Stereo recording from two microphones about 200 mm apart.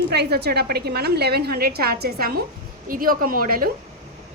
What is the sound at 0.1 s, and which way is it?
A woman's voice, 55° right (ahead or behind).